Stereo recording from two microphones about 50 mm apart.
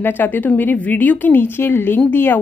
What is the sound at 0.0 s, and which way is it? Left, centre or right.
A woman's voice, left.